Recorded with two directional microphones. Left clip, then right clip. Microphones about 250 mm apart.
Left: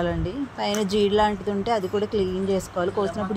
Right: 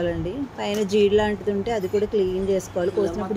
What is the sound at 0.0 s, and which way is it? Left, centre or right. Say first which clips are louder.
Speech: right 1 dB; centre.